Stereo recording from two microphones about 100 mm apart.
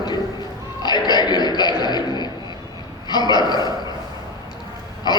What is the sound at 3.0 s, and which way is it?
Speech, 45° left (ahead or behind).